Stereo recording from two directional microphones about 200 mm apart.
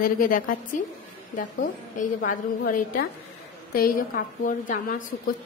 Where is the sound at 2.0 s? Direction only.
40° left (ahead or behind).